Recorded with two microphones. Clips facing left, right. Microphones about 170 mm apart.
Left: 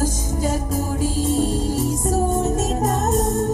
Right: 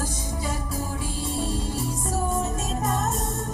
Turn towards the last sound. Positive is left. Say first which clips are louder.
# left 5 dB
turn(degrees=40)  # may be behind; listen again after turning